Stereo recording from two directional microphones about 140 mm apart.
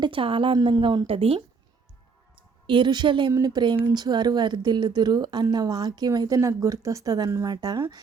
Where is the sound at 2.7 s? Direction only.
35° right (ahead or behind).